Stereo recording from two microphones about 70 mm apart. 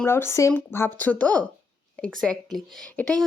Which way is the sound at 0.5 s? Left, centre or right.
Left.